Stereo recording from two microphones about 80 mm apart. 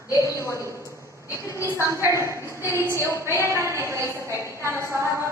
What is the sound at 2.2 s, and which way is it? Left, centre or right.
A woman's voice, left.